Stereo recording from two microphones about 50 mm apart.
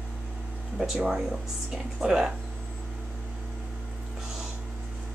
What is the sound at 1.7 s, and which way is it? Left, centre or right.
Speech, centre.